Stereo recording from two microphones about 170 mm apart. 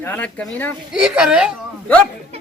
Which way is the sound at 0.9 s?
5° right (ahead or behind).